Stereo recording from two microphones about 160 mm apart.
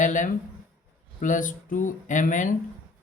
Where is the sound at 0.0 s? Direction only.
50° left (ahead or behind).